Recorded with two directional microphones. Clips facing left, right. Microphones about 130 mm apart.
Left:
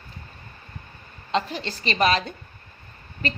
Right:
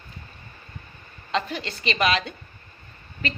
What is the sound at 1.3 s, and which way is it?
A woman's voice, 30° left (ahead or behind).